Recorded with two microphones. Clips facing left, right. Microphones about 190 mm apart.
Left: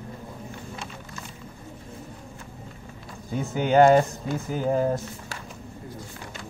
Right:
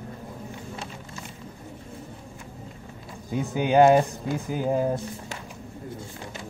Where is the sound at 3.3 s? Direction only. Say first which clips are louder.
Even; 15° right (ahead or behind).